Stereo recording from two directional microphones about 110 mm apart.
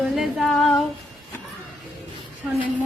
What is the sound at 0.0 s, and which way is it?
Female singing, centre (ahead or behind).